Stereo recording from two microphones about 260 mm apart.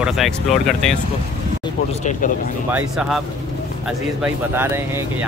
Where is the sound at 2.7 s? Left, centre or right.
Centre.